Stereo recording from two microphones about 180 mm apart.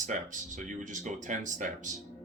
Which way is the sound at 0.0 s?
45° right (ahead or behind).